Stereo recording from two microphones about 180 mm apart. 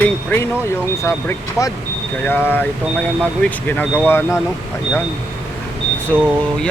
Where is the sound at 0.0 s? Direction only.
10° left (ahead or behind).